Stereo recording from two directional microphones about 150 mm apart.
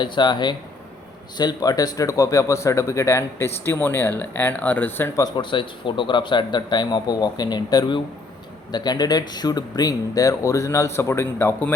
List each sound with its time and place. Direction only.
0.0 s speech: 30° left (ahead or behind); by 11.7 s 15° left (ahead or behind)